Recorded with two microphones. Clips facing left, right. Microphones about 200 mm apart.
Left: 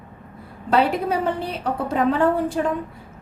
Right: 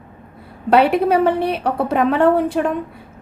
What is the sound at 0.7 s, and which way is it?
A woman's voice, 65° right (ahead or behind).